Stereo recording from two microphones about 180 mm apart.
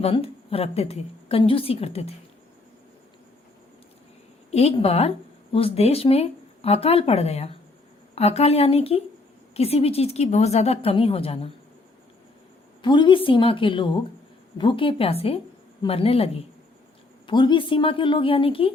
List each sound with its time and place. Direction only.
0.0 s a woman's voice: 30° left (ahead or behind)
4.5 s a woman's voice: 35° left (ahead or behind)
12.8 s a woman's voice: 25° left (ahead or behind)